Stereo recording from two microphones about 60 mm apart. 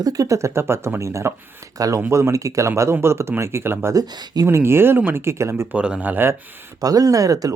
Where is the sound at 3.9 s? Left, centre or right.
Right.